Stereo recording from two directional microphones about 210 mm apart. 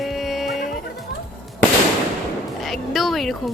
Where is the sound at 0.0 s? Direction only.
Centre (ahead or behind).